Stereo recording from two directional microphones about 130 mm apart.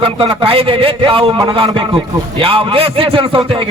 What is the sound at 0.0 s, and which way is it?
Speech, 40° right (ahead or behind).